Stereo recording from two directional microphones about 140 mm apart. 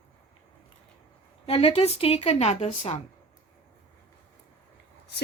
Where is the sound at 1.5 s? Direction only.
45° left (ahead or behind).